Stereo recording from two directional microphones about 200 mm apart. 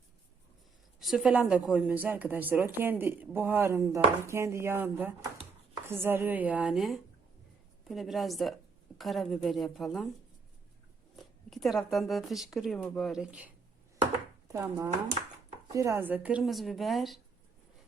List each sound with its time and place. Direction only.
0.9 s speech: centre (ahead or behind)
11.2 s speech: centre (ahead or behind)
14.4 s speech: 15° right (ahead or behind); by 17.2 s centre (ahead or behind)